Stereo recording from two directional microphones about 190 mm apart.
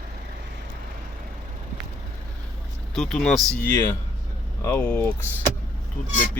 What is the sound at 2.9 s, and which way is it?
Speech, centre (ahead or behind).